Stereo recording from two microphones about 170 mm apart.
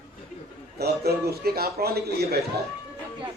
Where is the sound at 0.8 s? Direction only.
70° right (ahead or behind).